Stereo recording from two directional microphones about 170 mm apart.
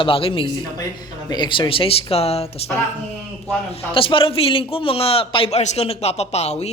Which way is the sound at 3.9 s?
30° left (ahead or behind).